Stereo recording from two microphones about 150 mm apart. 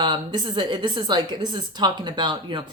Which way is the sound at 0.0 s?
30° right (ahead or behind).